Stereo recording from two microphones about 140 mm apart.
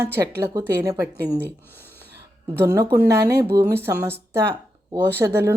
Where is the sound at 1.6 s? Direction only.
15° left (ahead or behind).